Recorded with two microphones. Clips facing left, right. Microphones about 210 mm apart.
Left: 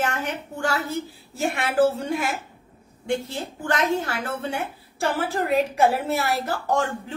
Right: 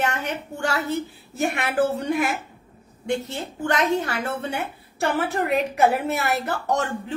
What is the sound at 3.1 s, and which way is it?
A woman's voice, 25° right (ahead or behind).